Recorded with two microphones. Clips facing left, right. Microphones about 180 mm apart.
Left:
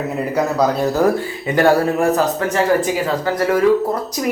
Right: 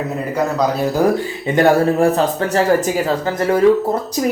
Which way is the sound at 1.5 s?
25° right (ahead or behind).